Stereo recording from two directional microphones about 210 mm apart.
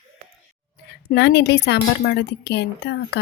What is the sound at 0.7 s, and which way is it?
A woman's voice, 55° left (ahead or behind).